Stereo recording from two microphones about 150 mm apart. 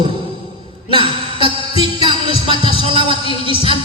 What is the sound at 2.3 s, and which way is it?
Heart sounds, 35° right (ahead or behind).